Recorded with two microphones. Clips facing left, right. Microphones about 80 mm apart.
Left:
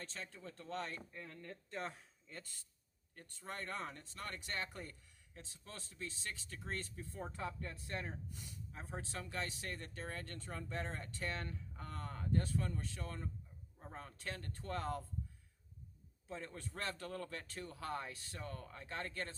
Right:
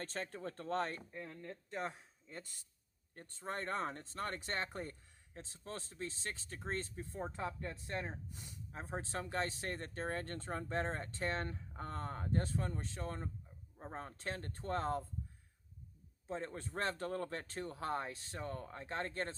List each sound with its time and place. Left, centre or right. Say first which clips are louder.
0.0 s speech: right 7 dB; right
1.1 s speech: right 3 dB; centre
3.2 s speech: right 5 dB; right
16.2 s speech: right 5 dB; right